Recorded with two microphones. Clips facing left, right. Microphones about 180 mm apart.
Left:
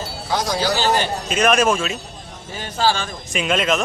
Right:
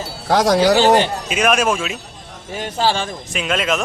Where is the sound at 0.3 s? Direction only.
85° right.